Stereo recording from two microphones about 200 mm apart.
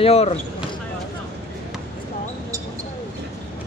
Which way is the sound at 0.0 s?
30° left (ahead or behind).